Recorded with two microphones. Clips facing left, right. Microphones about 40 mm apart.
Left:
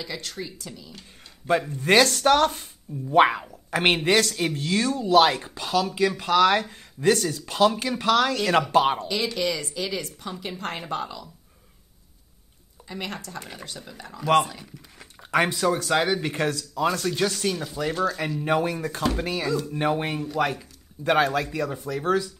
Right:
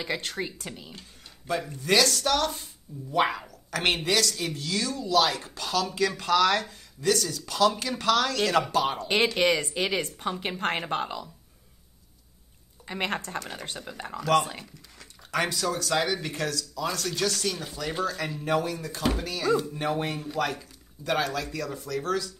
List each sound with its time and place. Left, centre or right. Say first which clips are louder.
0.0 s speech: right 3 dB; right
1.5 s a woman's voice: left 5 dB; left
3.3 s a woman's voice: left 5 dB; left
5.4 s speech: left 4 dB; centre
6.6 s a woman's voice: left 6 dB; left
7.7 s speech: left 3 dB; centre
8.7 s a woman's voice: left 6 dB; left
9.0 s speech: right 3 dB; right
12.8 s speech: right 4 dB; right
15.0 s speech: left 5 dB; left
18.4 s a woman's voice: left 3 dB; left
21.0 s speech: left 6 dB; left